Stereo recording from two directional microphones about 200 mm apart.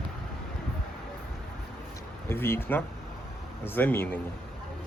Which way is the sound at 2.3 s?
10° left (ahead or behind).